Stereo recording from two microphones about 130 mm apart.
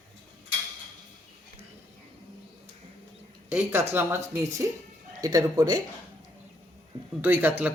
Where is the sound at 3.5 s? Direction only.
20° right (ahead or behind).